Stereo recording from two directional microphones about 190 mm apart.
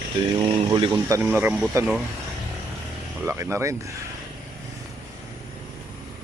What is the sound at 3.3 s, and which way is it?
Speech, 15° right (ahead or behind).